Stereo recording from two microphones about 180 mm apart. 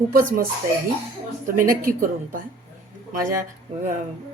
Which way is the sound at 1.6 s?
50° right (ahead or behind).